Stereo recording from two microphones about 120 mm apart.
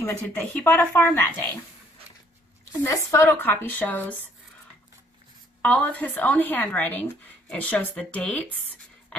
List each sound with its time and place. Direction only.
0.0 s a woman's voice: 15° left (ahead or behind)
2.8 s a woman's voice: 20° left (ahead or behind)
5.6 s a woman's voice: 10° left (ahead or behind)